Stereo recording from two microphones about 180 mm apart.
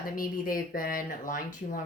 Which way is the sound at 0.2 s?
50° left (ahead or behind).